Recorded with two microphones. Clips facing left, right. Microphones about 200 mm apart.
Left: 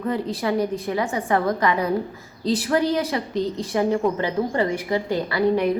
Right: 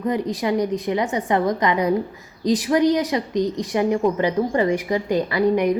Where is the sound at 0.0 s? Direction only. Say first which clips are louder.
Right 2 dB; 15° right (ahead or behind).